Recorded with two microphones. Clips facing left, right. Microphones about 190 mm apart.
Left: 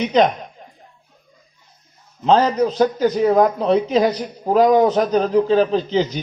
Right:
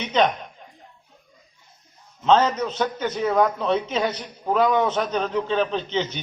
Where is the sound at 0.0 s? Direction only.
35° left (ahead or behind).